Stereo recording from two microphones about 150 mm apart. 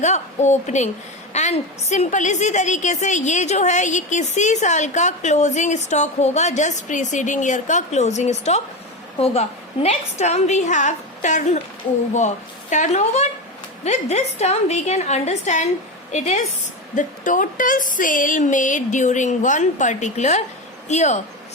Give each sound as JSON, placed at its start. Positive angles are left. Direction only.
{"t": 0.0, "sound": "a woman's voice", "side_deg": 50}
{"t": 12.7, "sound": "a woman's voice", "side_deg": 50}